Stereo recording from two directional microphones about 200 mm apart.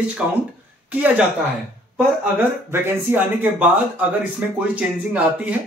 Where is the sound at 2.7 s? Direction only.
10° right (ahead or behind).